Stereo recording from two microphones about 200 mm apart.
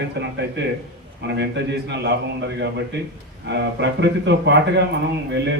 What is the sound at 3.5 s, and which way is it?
A man's voice, 60° right (ahead or behind).